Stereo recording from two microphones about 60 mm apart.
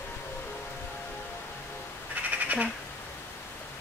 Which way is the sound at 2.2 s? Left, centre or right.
Right.